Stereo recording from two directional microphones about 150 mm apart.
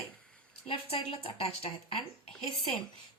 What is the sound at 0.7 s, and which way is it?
Speech, 40° left (ahead or behind).